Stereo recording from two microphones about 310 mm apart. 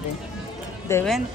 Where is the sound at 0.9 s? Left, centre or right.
Centre.